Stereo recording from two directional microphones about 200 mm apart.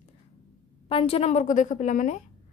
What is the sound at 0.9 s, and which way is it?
A woman's voice, 25° left (ahead or behind).